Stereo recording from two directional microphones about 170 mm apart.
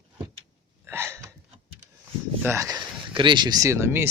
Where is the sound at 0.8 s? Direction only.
15° right (ahead or behind).